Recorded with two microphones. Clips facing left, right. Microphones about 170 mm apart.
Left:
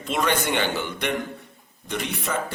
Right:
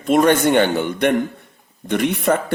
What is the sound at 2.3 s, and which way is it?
Speech, 60° right (ahead or behind).